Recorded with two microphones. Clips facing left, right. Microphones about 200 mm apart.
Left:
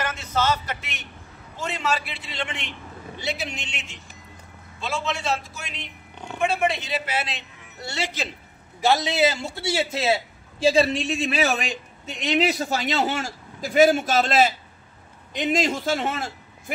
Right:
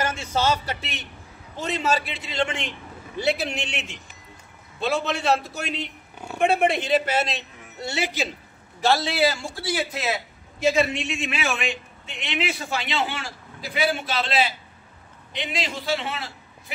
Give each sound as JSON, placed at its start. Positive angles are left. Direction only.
{"t": 0.0, "sound": "speech", "side_deg": -30}
{"t": 3.2, "sound": "a man's voice", "side_deg": -60}
{"t": 8.8, "sound": "a man's voice", "side_deg": 20}